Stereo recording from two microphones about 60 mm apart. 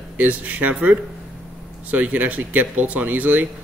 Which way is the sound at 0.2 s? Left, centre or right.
Right.